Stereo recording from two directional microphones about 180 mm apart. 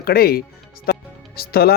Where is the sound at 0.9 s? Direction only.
60° left (ahead or behind).